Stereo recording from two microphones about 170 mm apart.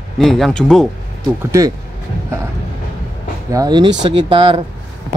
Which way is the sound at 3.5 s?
25° right (ahead or behind).